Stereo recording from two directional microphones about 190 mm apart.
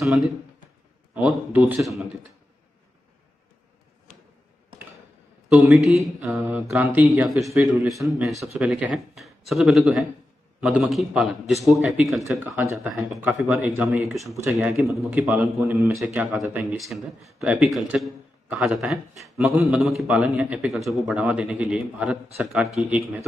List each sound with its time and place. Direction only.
0.0 s a man's voice: centre (ahead or behind)
5.6 s a man's voice: 5° right (ahead or behind)